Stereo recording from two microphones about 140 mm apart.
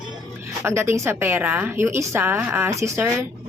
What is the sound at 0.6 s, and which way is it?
A woman's voice, 20° right (ahead or behind).